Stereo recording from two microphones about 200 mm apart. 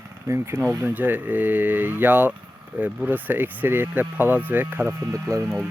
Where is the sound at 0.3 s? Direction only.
15° right (ahead or behind).